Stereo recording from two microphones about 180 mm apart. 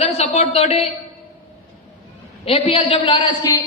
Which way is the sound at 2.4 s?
30° left (ahead or behind).